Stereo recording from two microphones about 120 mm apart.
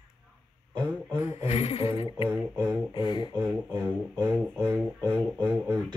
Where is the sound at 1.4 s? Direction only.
60° left (ahead or behind).